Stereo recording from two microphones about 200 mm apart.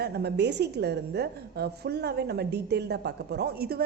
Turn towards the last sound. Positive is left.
turn(degrees=-50)  # may be behind; listen again after turning